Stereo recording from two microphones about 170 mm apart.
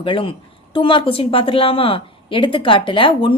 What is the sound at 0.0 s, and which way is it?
A woman's voice, 30° left (ahead or behind).